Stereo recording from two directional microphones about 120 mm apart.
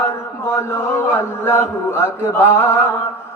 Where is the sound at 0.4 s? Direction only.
20° left (ahead or behind).